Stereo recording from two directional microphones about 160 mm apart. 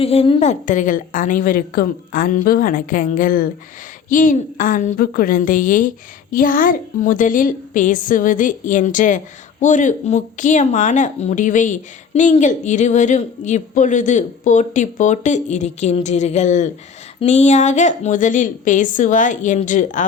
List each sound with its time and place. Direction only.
0.0 s a woman's voice: 40° left (ahead or behind)